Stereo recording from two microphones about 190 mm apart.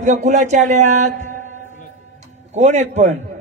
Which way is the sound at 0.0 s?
40° right (ahead or behind).